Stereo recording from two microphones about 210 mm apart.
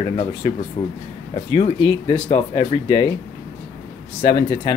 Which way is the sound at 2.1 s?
25° left (ahead or behind).